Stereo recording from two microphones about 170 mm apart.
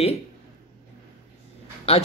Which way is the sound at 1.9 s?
35° left (ahead or behind).